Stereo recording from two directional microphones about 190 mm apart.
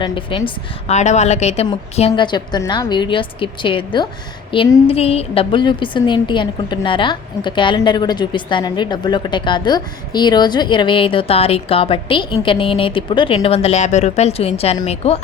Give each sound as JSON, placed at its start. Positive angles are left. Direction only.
{"t": 0.0, "sound": "a woman's voice", "side_deg": 25}